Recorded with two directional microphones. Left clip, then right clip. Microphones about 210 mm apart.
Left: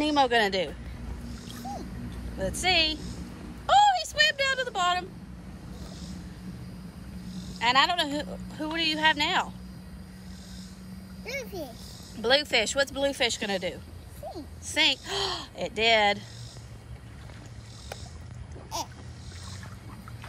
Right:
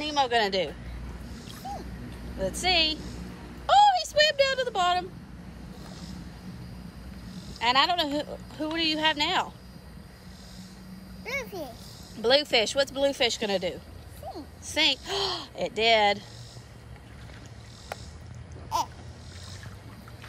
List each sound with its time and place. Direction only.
0.0 s speech: centre (ahead or behind)
2.3 s speech: 10° right (ahead or behind)
7.5 s speech: 10° right (ahead or behind)
11.2 s speech: 15° right (ahead or behind)
18.7 s speech: 10° right (ahead or behind)